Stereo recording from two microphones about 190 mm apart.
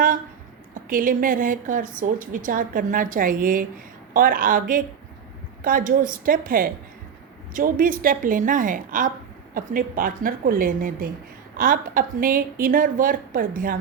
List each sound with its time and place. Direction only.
0.7 s a woman's voice: 45° right (ahead or behind)